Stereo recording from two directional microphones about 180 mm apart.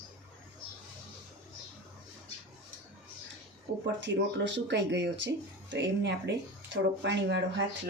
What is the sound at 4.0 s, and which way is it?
Speech, 80° right.